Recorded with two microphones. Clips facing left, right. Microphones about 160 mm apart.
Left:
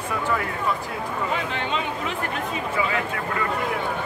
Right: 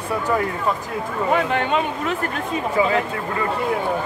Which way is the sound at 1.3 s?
55° right (ahead or behind).